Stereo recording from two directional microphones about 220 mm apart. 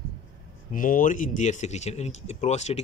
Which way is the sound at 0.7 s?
40° left (ahead or behind).